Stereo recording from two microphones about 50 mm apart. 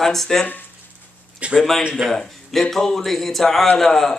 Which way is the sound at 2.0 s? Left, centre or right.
Centre.